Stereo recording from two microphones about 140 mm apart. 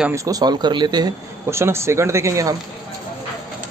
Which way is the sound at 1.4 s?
20° right (ahead or behind).